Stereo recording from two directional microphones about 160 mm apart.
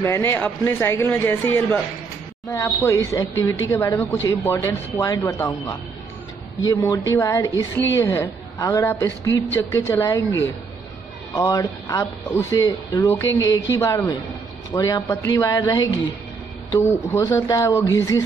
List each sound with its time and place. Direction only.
0.0 s a woman's voice: 15° left (ahead or behind)
12.6 s a woman's voice: 25° left (ahead or behind)